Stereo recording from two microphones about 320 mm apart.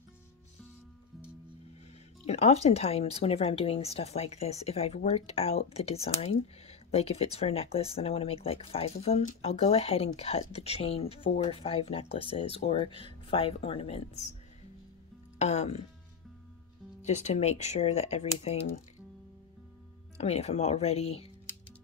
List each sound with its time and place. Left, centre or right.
2.2 s speech: centre
15.3 s speech: left
17.0 s speech: left
20.2 s speech: centre